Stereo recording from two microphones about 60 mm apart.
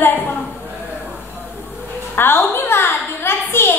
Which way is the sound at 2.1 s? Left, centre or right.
Left.